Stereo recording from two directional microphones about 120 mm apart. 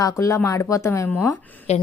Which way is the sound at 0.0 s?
25° left (ahead or behind).